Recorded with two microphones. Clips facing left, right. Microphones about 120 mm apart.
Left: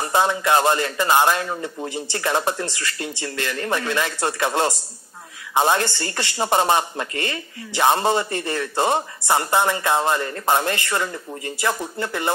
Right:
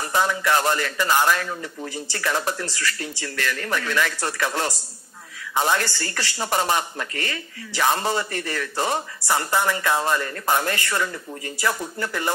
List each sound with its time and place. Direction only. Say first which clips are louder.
0.0 s speech: left 3 dB; 20° left (ahead or behind)